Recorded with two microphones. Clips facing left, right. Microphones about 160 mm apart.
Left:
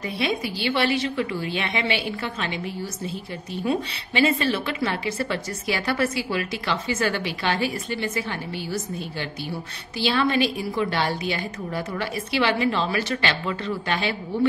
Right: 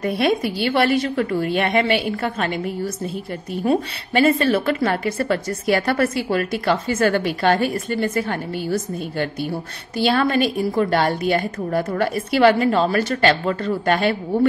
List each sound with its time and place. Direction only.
0.0 s a woman's voice: 55° right (ahead or behind)